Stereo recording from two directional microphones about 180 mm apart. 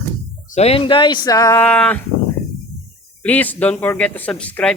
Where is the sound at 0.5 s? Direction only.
35° left (ahead or behind); by 2.0 s 5° left (ahead or behind).